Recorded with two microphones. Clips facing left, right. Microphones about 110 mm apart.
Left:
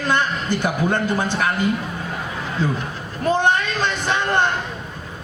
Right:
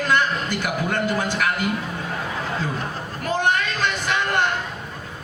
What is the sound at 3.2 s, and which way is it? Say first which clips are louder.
A man's voice: left 4 dB; 25° left (ahead or behind).